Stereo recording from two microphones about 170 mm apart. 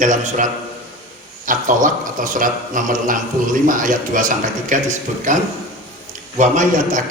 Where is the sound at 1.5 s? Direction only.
50° right (ahead or behind).